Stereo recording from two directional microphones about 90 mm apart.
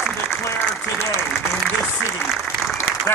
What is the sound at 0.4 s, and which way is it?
Applause, 30° left (ahead or behind).